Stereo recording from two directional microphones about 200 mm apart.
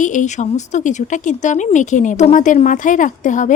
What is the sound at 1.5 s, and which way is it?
Speech, 40° left (ahead or behind).